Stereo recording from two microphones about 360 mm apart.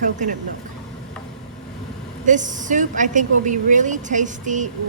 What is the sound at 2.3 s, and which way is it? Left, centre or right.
A woman's voice, right.